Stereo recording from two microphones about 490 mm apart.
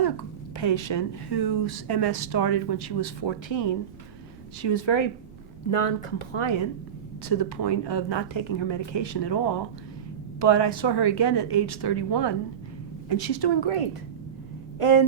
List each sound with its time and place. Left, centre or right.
0.0 s speech: left
5.7 s speech: left
7.3 s speech: left
14.8 s speech: left